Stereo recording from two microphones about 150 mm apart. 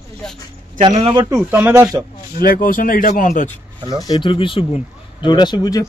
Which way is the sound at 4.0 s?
30° left (ahead or behind).